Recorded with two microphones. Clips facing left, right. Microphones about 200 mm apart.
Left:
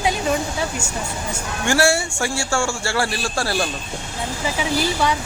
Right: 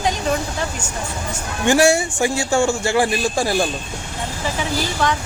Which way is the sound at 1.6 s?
15° right (ahead or behind).